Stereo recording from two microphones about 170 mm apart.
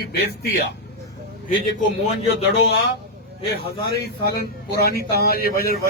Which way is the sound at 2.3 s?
70° left (ahead or behind).